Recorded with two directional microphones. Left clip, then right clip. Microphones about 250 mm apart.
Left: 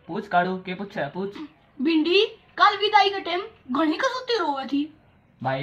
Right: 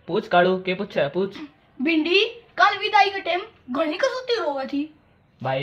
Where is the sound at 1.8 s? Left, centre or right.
Centre.